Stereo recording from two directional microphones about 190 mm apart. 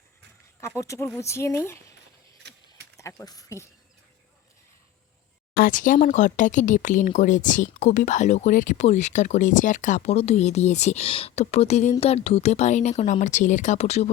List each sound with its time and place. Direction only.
0.6 s speech: 15° left (ahead or behind)
2.4 s a sound: 65° right (ahead or behind)
3.2 s speech: 15° left (ahead or behind)
5.5 s speech: 45° left (ahead or behind)